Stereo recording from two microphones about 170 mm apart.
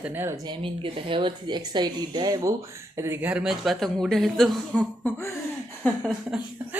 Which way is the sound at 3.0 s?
10° right (ahead or behind).